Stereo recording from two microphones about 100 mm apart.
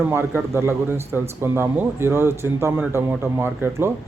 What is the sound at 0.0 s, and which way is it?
A man's voice, 25° right (ahead or behind).